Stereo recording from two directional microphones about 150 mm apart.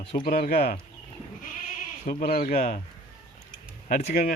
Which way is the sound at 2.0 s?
80° left.